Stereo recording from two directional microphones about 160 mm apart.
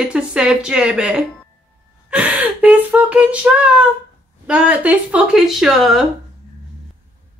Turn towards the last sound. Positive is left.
turn(degrees=0)  # may be behind; listen again after turning